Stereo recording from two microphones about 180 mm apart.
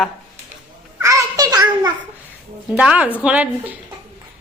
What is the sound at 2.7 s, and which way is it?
A woman's voice, 5° right (ahead or behind).